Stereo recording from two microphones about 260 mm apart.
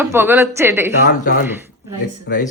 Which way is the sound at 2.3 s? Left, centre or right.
Left.